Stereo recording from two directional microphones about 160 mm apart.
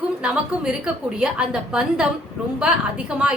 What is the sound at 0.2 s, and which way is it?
A woman's voice, 5° right (ahead or behind).